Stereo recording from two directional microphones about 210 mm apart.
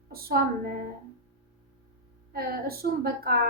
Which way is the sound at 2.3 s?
45° right (ahead or behind).